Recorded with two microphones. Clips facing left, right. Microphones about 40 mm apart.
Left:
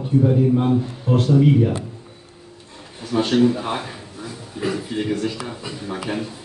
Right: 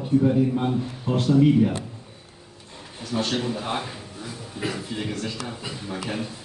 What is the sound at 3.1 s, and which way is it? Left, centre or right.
Speech, left.